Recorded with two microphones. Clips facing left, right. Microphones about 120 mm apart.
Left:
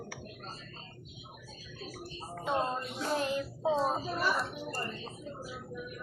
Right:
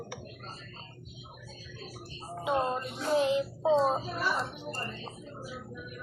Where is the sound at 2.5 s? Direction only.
20° right (ahead or behind).